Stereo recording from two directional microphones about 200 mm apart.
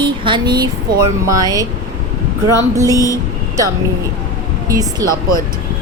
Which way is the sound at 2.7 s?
15° right (ahead or behind).